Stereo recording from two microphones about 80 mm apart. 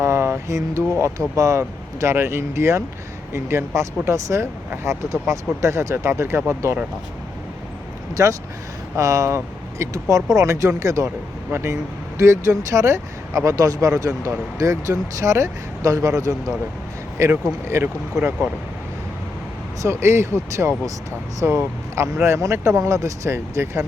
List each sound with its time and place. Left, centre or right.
0.0 s a sound: right
1.4 s speech: right
8.1 s speech: right
19.8 s speech: right